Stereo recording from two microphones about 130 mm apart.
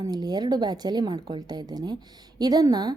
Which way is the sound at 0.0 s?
30° right (ahead or behind).